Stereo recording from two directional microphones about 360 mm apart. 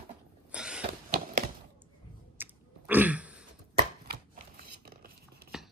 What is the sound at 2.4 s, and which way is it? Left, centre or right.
Chewing, centre.